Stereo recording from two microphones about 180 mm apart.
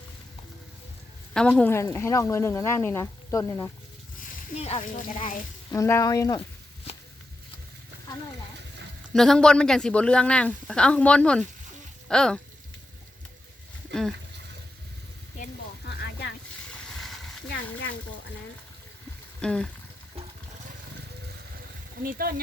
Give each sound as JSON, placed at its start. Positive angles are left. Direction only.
{"t": 1.3, "sound": "speech", "side_deg": 5}
{"t": 4.5, "sound": "speech", "side_deg": 35}
{"t": 5.7, "sound": "speech", "side_deg": 15}
{"t": 9.1, "sound": "a woman's voice", "side_deg": 5}
{"t": 19.4, "sound": "frying", "side_deg": 5}
{"t": 22.0, "sound": "speech", "side_deg": -55}